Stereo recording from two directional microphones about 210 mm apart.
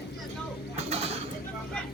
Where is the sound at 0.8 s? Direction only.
30° right (ahead or behind).